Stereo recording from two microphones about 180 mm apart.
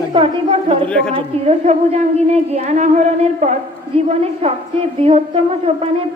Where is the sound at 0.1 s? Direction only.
30° right (ahead or behind).